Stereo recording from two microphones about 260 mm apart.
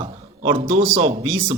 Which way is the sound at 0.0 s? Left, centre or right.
Centre.